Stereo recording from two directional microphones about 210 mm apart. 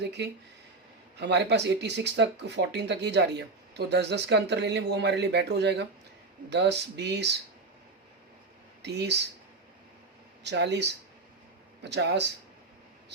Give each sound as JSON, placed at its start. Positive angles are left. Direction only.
{"t": 0.0, "sound": "speech", "side_deg": -55}
{"t": 8.8, "sound": "speech", "side_deg": -55}
{"t": 10.4, "sound": "speech", "side_deg": -55}